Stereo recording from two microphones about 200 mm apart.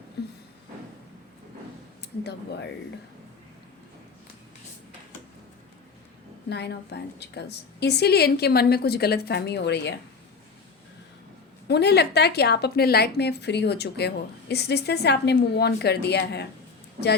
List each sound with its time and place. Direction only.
0.2 s a sound: 55° left (ahead or behind)
2.0 s speech: 55° left (ahead or behind)
6.5 s a woman's voice: 55° left (ahead or behind)
11.7 s a woman's voice: 55° left (ahead or behind)